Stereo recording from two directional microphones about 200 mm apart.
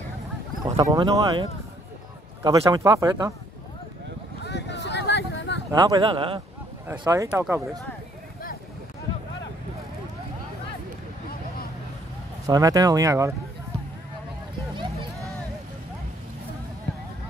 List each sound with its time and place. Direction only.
0.7 s speech: 15° right (ahead or behind)
4.5 s a sound: 60° left (ahead or behind)
5.7 s speech: 20° right (ahead or behind)
6.9 s speech: 15° right (ahead or behind)
12.4 s speech: 15° right (ahead or behind)
14.8 s a sound: 25° right (ahead or behind)